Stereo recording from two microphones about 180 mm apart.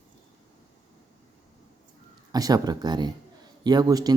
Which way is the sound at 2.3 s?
20° right (ahead or behind).